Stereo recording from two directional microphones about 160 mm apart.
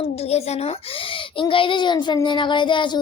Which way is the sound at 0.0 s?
40° left (ahead or behind).